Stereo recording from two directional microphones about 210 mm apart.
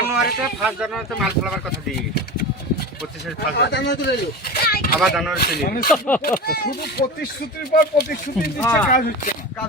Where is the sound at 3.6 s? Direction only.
50° left (ahead or behind).